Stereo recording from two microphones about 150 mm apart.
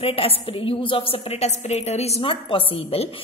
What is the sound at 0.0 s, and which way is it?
A woman's voice, 40° left (ahead or behind).